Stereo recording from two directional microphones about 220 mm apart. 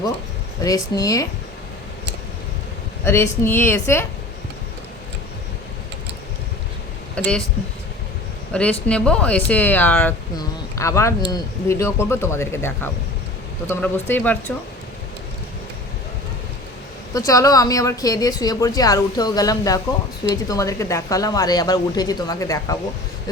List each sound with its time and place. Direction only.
0.6 s speech: 15° left (ahead or behind)
3.0 s speech: 10° left (ahead or behind)
8.5 s speech: 5° left (ahead or behind)
17.2 s speech: 15° left (ahead or behind)